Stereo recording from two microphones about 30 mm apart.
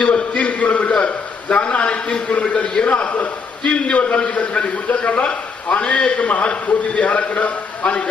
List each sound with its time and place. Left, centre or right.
0.0 s a man's voice: left
4.0 s a man's voice: left
5.8 s a man's voice: left